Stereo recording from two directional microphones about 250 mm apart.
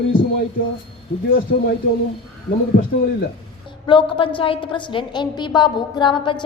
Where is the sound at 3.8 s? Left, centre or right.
Centre.